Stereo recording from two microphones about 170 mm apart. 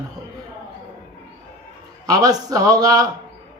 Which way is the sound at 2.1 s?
20° right (ahead or behind).